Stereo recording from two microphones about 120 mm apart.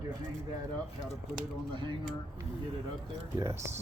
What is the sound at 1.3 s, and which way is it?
Speech, 45° right (ahead or behind).